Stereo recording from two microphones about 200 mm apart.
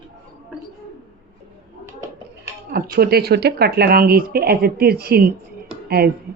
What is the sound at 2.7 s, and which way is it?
Speech, 50° right (ahead or behind).